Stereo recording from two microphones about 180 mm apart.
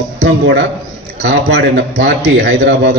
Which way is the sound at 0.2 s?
70° right (ahead or behind).